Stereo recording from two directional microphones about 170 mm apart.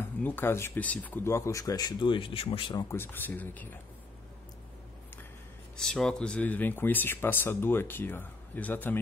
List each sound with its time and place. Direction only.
0.2 s speech: 10° left (ahead or behind); by 2.6 s 35° left (ahead or behind)
2.7 s speech: 20° left (ahead or behind)
5.8 s speech: 5° left (ahead or behind)